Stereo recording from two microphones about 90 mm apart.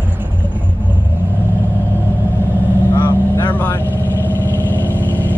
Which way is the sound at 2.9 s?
25° left (ahead or behind).